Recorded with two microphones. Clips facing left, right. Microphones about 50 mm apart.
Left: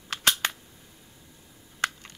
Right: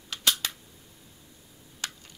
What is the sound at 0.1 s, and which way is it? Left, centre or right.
Camera, left.